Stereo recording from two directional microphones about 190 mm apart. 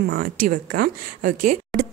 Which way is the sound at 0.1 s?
50° right (ahead or behind).